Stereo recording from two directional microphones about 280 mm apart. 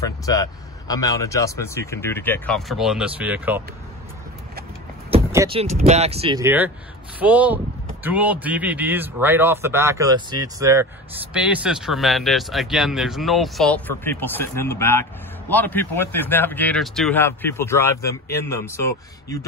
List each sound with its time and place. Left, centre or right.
0.0 s speech: centre
5.3 s speech: centre
6.4 s speech: centre